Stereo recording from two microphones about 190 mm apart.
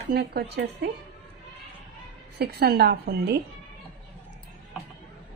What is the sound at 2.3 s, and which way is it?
A woman's voice, 55° right (ahead or behind).